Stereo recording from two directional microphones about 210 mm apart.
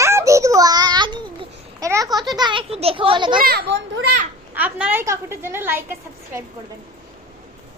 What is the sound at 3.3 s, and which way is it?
Speech, 45° right (ahead or behind).